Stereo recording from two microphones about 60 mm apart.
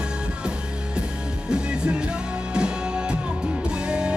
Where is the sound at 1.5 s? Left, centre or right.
Centre.